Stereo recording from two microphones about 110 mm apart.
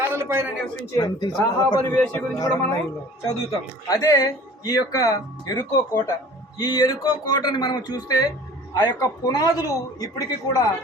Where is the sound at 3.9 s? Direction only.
30° left (ahead or behind).